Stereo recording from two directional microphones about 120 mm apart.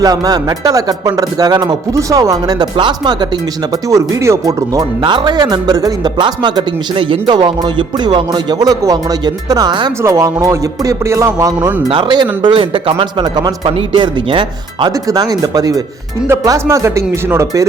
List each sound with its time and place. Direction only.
0.0 s speech: 30° right (ahead or behind)
3.7 s speech: 30° right (ahead or behind)
10.0 s speech: 25° right (ahead or behind)
11.9 s speech: 40° right (ahead or behind)
14.9 s speech: 30° right (ahead or behind)